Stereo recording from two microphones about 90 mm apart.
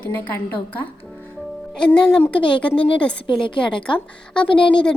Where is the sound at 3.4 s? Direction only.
65° left (ahead or behind).